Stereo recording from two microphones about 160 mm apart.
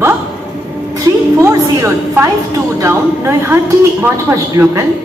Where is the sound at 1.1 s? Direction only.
20° right (ahead or behind).